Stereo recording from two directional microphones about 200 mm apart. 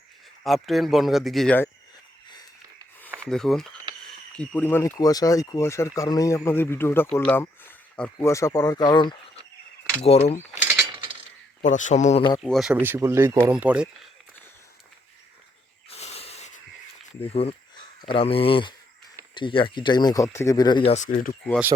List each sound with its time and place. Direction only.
0.4 s speech: centre (ahead or behind)
3.2 s speech: centre (ahead or behind); by 10.6 s 30° left (ahead or behind)
11.6 s speech: 40° left (ahead or behind)
12.4 s speech: centre (ahead or behind)
15.9 s snake: 30° left (ahead or behind)
17.2 s speech: 30° left (ahead or behind)